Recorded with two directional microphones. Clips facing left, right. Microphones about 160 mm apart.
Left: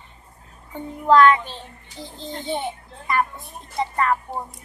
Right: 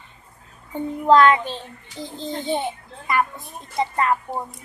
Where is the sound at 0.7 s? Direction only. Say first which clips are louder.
Right 1 dB; 20° right (ahead or behind).